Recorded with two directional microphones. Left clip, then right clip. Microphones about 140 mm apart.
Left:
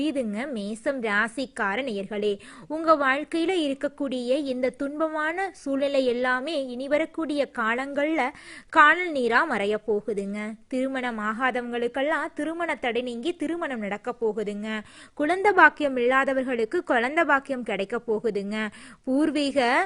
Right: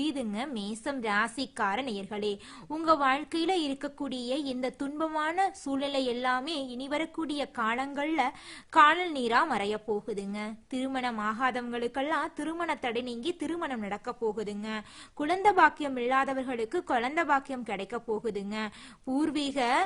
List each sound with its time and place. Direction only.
0.0 s a woman's voice: 25° left (ahead or behind)